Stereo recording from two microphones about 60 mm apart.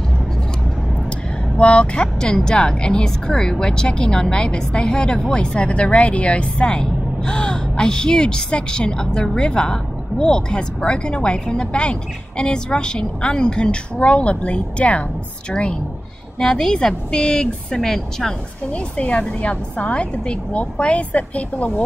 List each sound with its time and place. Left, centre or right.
1.6 s a woman's voice: centre
16.3 s a woman's voice: centre
18.7 s a woman's voice: left